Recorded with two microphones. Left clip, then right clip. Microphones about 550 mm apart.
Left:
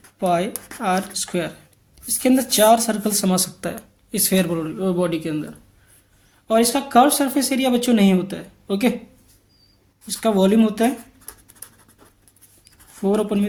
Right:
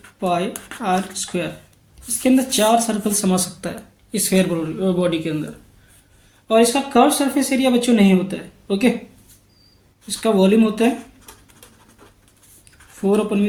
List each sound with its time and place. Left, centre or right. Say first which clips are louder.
0.2 s speech: left 1 dB; left
6.5 s speech: right 2 dB; left
10.1 s speech: right 2 dB; left
13.0 s speech: right 2 dB; left